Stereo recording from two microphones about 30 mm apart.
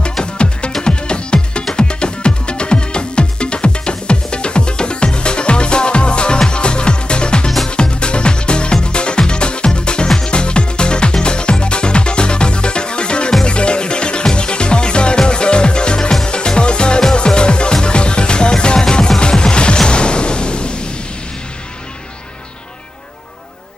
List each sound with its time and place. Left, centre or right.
0.0 s music: left